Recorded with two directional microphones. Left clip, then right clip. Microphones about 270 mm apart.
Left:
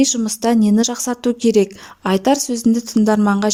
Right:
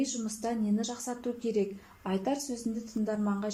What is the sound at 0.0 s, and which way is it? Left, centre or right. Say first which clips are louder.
A woman's voice: left 17 dB; left.